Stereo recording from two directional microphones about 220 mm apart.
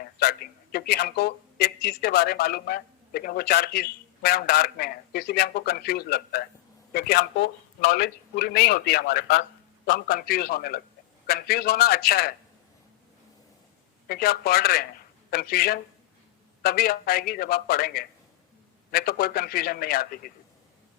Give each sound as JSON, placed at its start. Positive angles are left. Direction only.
{"t": 0.0, "sound": "a man's voice", "side_deg": 45}
{"t": 14.1, "sound": "a man's voice", "side_deg": 45}